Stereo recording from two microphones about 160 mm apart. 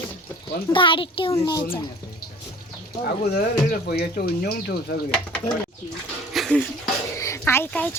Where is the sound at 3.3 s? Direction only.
80° left.